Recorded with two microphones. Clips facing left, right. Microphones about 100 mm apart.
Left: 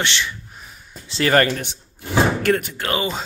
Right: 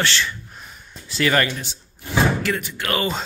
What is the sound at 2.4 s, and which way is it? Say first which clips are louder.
Speech: left 6 dB; 55° left (ahead or behind).